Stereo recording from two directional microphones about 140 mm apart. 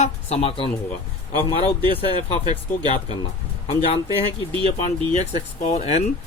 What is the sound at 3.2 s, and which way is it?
Speech, 45° left (ahead or behind).